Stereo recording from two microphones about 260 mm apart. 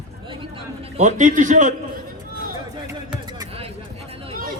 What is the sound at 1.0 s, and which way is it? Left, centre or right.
Speech, right.